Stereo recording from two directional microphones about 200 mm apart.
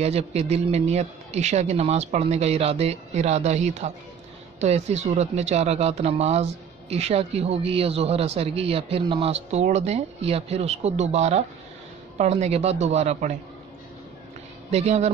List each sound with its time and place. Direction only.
0.0 s speech: 30° right (ahead or behind)
14.7 s speech: 35° right (ahead or behind)